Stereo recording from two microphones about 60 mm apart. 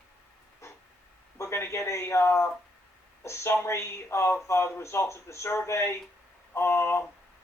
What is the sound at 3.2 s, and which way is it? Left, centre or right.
Speech, left.